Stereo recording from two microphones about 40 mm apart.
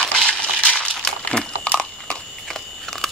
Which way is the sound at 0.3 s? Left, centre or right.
Left.